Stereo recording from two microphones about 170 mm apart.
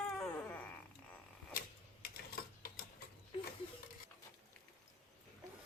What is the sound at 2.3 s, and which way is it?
Typewriter, 60° left (ahead or behind).